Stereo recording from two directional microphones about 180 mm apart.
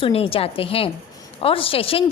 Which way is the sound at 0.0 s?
30° left (ahead or behind).